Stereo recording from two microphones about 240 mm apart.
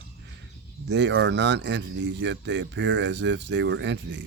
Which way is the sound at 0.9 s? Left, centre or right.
Right.